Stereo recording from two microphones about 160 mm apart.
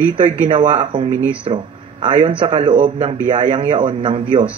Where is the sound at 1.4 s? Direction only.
35° right (ahead or behind).